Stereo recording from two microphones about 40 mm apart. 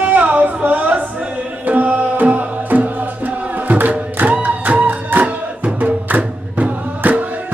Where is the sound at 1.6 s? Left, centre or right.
Right.